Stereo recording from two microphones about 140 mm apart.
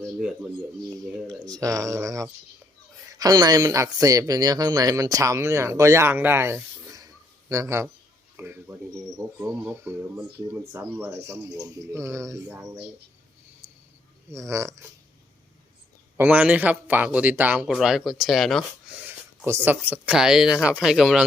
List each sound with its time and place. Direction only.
0.2 s speech: 5° right (ahead or behind)
1.5 s speech: 25° right (ahead or behind)
13.6 s a sound: 15° right (ahead or behind)
14.3 s speech: 20° right (ahead or behind)
16.1 s speech: 10° right (ahead or behind)
18.9 s speech: 10° right (ahead or behind)